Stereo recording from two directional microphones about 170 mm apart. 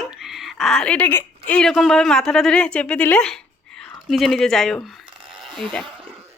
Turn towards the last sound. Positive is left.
turn(degrees=0)  # may be behind; listen again after turning